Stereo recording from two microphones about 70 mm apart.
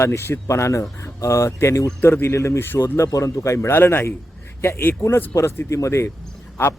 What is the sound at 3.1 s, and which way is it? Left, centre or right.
Speech, left.